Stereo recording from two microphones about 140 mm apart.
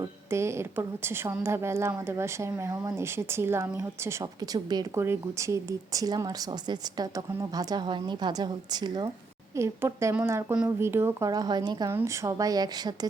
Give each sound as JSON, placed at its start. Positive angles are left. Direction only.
{"t": 0.0, "sound": "a woman's voice", "side_deg": -20}